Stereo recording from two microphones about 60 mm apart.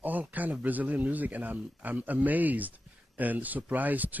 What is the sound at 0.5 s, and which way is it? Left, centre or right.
Speech, right.